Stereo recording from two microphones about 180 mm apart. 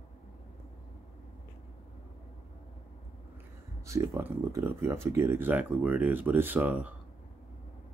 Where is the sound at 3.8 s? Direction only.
15° right (ahead or behind).